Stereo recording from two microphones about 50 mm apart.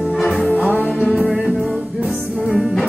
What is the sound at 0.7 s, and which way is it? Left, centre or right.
Music, left.